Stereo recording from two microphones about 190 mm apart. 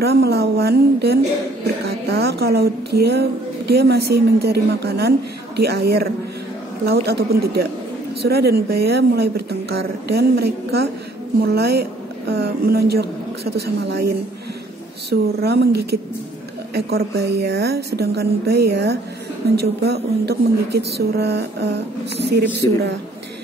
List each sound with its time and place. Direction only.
0.0 s a woman's voice: 55° right (ahead or behind)
22.6 s a woman's voice: 15° left (ahead or behind)